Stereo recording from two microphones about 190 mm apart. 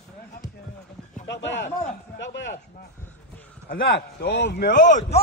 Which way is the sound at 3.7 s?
60° left (ahead or behind).